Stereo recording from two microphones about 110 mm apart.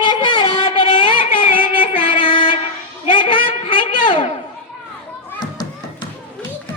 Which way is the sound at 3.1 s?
50° left (ahead or behind).